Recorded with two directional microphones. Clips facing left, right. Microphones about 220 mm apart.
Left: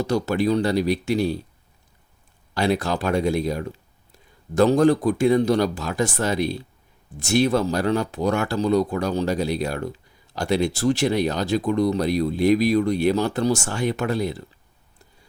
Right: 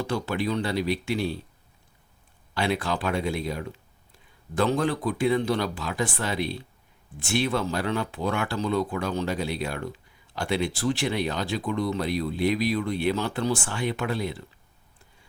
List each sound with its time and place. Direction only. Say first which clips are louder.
0.0 s speech: left 6 dB; 40° left (ahead or behind)
2.6 s speech: left 5 dB; 40° left (ahead or behind)